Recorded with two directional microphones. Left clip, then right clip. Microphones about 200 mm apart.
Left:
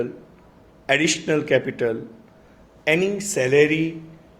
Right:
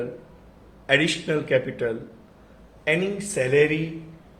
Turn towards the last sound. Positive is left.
turn(degrees=50)  # may be behind; listen again after turning